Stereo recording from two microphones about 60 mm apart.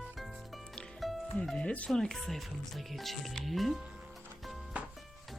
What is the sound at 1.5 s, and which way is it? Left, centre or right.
Speech, centre.